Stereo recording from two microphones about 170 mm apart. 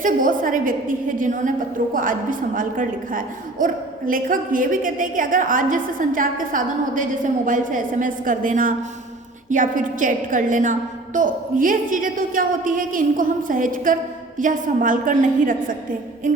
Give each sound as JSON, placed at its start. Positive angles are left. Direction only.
{"t": 0.0, "sound": "a woman's voice", "side_deg": -50}